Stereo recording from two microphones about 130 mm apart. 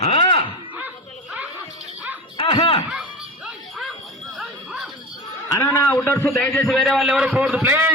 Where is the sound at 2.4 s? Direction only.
45° left (ahead or behind).